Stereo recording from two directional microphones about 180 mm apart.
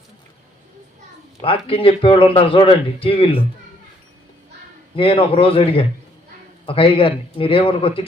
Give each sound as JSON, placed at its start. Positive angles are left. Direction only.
{"t": 1.4, "sound": "speech", "side_deg": 30}
{"t": 4.9, "sound": "speech", "side_deg": 30}